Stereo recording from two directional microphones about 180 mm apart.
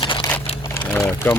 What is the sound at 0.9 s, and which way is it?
Speech, 10° left (ahead or behind).